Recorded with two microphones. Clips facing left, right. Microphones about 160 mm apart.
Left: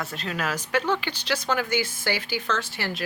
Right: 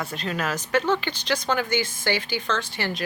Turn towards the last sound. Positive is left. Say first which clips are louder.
# right 2 dB
turn(degrees=5)  # may be behind; listen again after turning